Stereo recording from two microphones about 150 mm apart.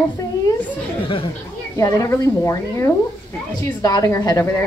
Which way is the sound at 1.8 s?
20° left (ahead or behind).